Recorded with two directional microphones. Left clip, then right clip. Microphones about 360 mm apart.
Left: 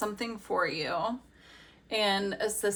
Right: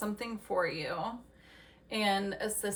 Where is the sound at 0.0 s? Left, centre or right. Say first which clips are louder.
Left 4 dB; centre.